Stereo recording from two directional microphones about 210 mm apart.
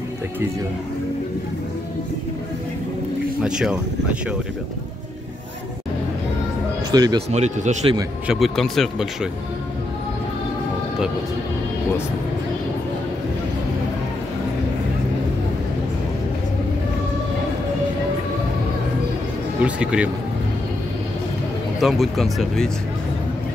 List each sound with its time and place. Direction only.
3.4 s speech: 5° right (ahead or behind)
6.9 s speech: 20° right (ahead or behind)
7.2 s speech: 35° right (ahead or behind)
8.3 s speech: centre (ahead or behind)
19.6 s speech: 5° right (ahead or behind)
21.7 s speech: centre (ahead or behind)